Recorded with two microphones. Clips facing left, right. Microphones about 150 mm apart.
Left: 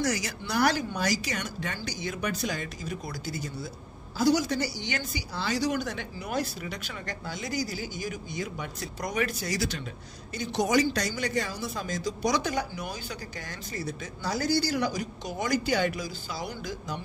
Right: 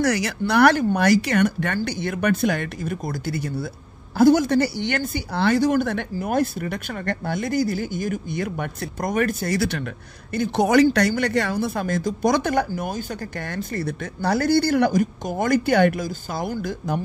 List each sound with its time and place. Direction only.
0.0 s speech: 65° right (ahead or behind); by 13.0 s 50° right (ahead or behind)
13.5 s speech: 60° right (ahead or behind)